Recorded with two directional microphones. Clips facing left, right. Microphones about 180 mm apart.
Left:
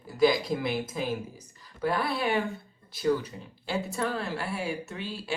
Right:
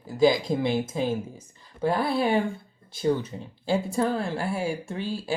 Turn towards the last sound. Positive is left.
turn(degrees=-30)  # may be behind; listen again after turning